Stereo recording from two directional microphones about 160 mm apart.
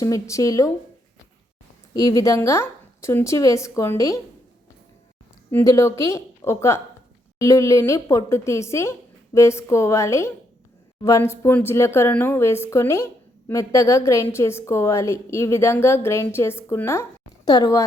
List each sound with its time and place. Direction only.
0.0 s speech: 20° left (ahead or behind)
1.9 s speech: 20° left (ahead or behind)
5.5 s a woman's voice: 15° left (ahead or behind)